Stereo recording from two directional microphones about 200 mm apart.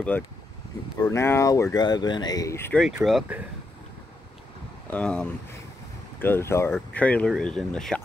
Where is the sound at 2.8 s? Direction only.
Centre (ahead or behind).